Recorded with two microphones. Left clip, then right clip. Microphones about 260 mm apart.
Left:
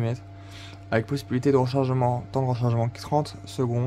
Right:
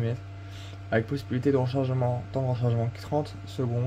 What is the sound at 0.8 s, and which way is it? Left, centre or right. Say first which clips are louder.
Speech: left 2 dB; centre.